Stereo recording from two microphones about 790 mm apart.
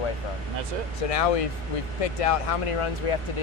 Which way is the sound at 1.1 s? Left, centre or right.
Left.